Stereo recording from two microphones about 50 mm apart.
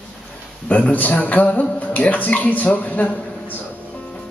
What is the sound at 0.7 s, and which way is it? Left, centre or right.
A man's voice, left.